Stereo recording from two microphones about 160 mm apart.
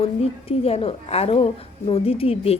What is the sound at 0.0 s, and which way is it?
A woman's voice, 35° left (ahead or behind).